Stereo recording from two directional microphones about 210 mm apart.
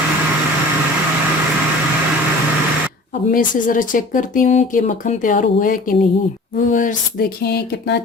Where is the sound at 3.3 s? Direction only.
40° left (ahead or behind).